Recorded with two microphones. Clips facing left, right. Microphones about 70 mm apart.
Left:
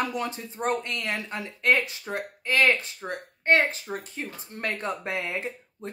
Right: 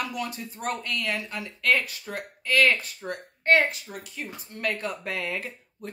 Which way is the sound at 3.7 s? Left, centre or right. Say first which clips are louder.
Left 5 dB; left.